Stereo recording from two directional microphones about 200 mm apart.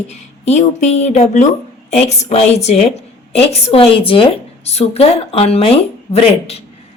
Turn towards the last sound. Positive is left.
turn(degrees=30)  # may be behind; listen again after turning